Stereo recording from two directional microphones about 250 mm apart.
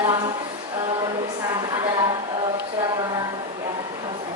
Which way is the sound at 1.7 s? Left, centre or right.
Centre.